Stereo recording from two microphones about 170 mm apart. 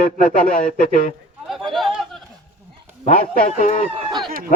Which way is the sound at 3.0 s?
50° left (ahead or behind).